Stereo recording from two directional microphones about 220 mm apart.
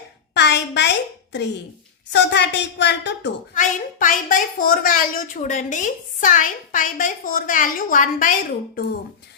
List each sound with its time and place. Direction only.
0.3 s a sound: 50° left (ahead or behind)
2.1 s a woman's voice: 50° left (ahead or behind)
3.5 s a woman's voice: 35° left (ahead or behind)